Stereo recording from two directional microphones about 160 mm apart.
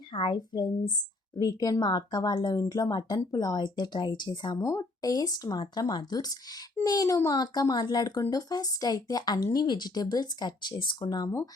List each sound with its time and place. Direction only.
0.1 s speech: 30° left (ahead or behind)